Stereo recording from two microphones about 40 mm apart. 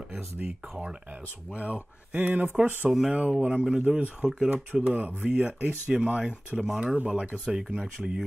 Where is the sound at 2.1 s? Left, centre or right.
Right.